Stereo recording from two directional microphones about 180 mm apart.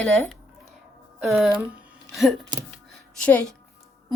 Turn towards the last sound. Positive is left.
turn(degrees=5)  # may be behind; listen again after turning